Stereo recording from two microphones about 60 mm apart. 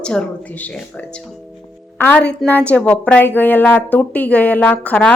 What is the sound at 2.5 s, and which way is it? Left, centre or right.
A woman's voice, left.